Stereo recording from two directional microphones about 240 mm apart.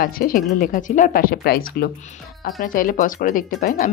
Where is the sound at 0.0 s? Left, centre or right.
Left.